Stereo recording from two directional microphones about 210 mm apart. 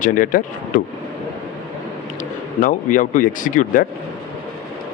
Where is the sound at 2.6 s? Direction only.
40° left (ahead or behind).